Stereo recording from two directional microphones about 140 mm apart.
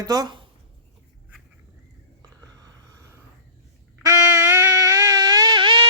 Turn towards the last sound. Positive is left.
turn(degrees=-30)  # may be behind; listen again after turning